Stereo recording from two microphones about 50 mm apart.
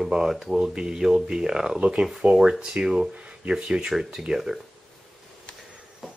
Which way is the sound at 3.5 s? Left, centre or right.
Centre.